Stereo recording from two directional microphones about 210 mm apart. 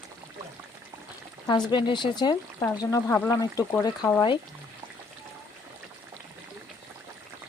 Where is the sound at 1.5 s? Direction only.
20° left (ahead or behind).